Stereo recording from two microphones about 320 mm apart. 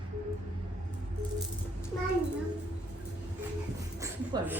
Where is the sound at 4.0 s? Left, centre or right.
Centre.